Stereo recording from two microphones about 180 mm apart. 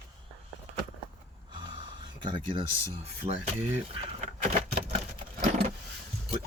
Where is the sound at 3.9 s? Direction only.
40° right (ahead or behind).